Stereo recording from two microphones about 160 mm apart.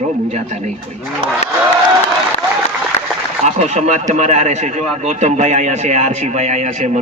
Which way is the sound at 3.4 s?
45° right (ahead or behind).